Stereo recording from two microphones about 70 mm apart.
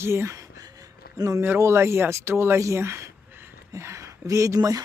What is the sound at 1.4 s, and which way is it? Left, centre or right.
Speech, right.